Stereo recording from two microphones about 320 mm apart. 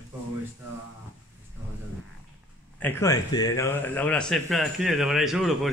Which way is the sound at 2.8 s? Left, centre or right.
Centre.